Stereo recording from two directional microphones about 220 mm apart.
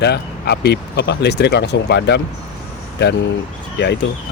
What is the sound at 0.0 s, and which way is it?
Speech, 50° left (ahead or behind).